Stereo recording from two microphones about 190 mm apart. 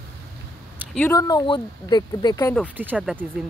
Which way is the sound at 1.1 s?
20° left (ahead or behind).